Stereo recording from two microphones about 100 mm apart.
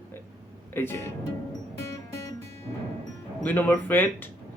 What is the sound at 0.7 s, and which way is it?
Speech, 25° left (ahead or behind).